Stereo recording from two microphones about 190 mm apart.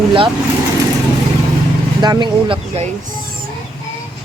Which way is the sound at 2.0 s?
20° right (ahead or behind).